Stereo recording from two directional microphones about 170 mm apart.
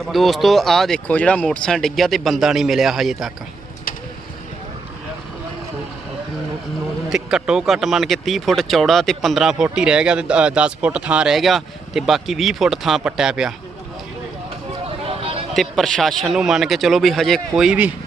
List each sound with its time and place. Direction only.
0.0 s speech: centre (ahead or behind)
7.1 s speech: 5° right (ahead or behind)
15.0 s a sound: 35° right (ahead or behind)
15.5 s speech: centre (ahead or behind)